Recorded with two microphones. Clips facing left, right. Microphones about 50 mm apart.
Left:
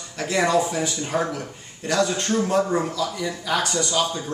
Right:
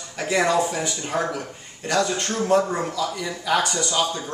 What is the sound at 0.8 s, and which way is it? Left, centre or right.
Speech, centre.